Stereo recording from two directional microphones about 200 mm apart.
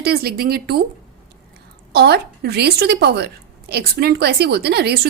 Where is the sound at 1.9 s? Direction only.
55° right (ahead or behind).